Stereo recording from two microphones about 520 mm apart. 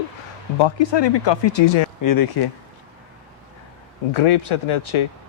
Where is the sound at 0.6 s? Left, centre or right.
Left.